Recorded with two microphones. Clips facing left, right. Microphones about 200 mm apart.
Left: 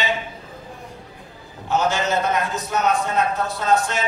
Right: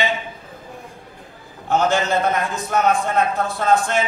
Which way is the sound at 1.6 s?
50° right (ahead or behind).